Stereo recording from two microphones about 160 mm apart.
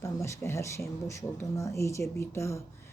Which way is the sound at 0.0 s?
15° left (ahead or behind).